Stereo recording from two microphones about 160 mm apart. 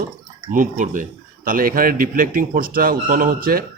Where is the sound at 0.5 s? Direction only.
55° right (ahead or behind).